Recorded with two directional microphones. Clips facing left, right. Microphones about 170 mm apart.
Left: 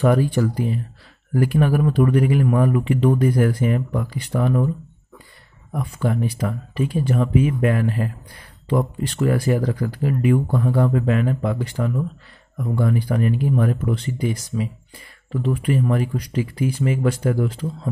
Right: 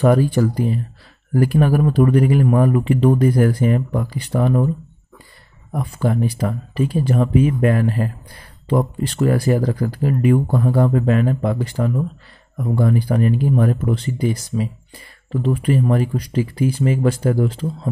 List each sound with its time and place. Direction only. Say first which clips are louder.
0.0 s speech: right 3 dB; 35° right (ahead or behind)
5.7 s speech: right 2 dB; 35° right (ahead or behind)